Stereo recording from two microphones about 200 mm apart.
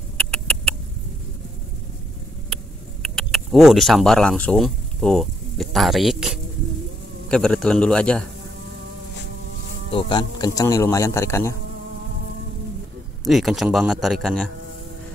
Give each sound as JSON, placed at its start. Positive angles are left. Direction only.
{"t": 0.3, "sound": "rodents", "side_deg": 5}
{"t": 2.5, "sound": "a sound", "side_deg": 0}
{"t": 7.2, "sound": "a man's voice", "side_deg": 5}
{"t": 9.8, "sound": "speech", "side_deg": 25}
{"t": 13.2, "sound": "a man's voice", "side_deg": 0}